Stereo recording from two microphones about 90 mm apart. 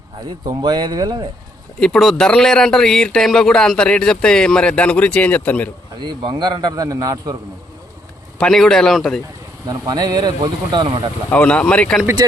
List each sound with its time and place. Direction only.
0.4 s a man's voice: 50° right (ahead or behind)
1.8 s speech: 5° left (ahead or behind)
6.0 s a man's voice: 55° right (ahead or behind); by 7.3 s 40° right (ahead or behind)
8.4 s speech: 5° left (ahead or behind)
9.6 s a man's voice: 45° right (ahead or behind)
11.3 s speech: 15° left (ahead or behind)